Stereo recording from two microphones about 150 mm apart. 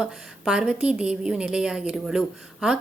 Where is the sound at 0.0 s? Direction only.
5° right (ahead or behind).